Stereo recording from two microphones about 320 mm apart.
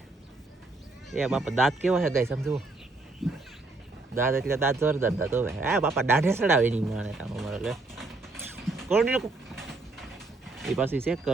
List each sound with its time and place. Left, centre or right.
1.1 s speech: centre
6.8 s pigeon: centre